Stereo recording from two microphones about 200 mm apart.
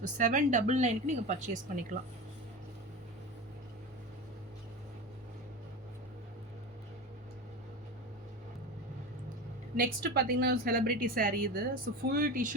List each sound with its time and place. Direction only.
0.0 s a woman's voice: 40° right (ahead or behind)
9.7 s speech: 50° right (ahead or behind)